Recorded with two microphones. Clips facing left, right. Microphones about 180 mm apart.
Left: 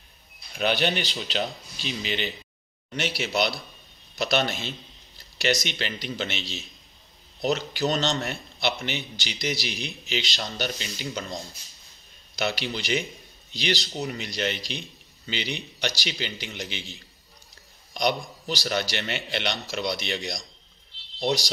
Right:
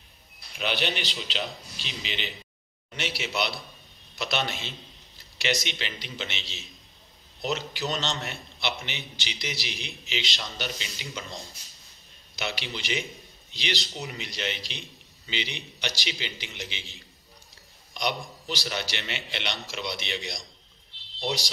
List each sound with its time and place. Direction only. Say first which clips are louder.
0.6 s a man's voice: left 5 dB; 45° left (ahead or behind)
12.4 s a man's voice: left 6 dB; 40° left (ahead or behind)
17.9 s a man's voice: left 5 dB; 40° left (ahead or behind)